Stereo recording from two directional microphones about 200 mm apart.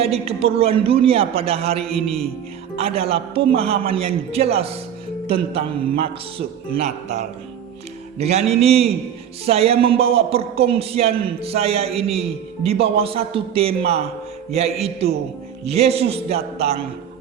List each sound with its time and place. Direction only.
0.0 s a man's voice: 30° right (ahead or behind)
1.8 s a man's voice: centre (ahead or behind)
2.7 s a man's voice: 30° right (ahead or behind)